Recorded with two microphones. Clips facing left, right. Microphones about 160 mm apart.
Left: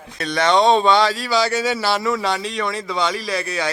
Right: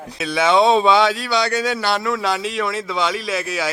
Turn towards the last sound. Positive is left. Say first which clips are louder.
# even
turn(degrees=-5)  # may be behind; listen again after turning